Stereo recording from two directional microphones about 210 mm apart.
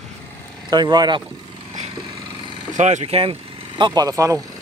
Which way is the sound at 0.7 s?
20° right (ahead or behind).